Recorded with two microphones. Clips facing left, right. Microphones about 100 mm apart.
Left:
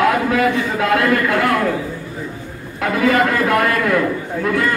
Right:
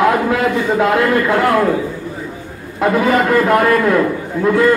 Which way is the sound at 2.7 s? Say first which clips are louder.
Right 2 dB; 25° right (ahead or behind).